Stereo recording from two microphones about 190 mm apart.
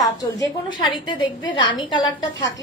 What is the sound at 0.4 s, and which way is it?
A woman's voice, 25° left (ahead or behind).